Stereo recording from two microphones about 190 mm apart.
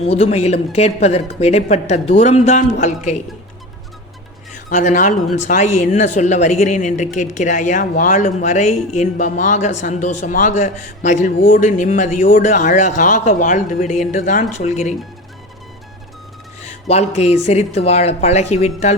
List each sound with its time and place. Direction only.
0.0 s speech: 35° left (ahead or behind)
4.5 s speech: 40° left (ahead or behind)
16.6 s speech: 35° left (ahead or behind)